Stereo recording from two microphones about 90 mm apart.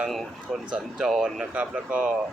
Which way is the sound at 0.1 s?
Centre (ahead or behind).